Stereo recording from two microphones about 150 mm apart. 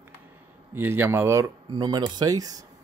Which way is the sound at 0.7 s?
15° right (ahead or behind).